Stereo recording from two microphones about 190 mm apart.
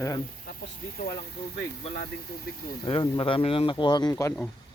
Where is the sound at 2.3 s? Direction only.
50° left (ahead or behind).